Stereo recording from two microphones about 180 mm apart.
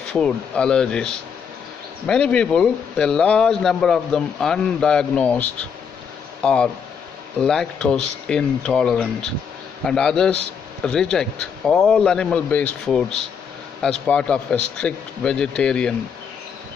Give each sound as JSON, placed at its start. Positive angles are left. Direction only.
{"t": 0.1, "sound": "speech", "side_deg": 5}